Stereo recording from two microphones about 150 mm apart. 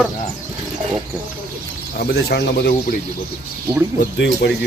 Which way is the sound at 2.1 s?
90° left.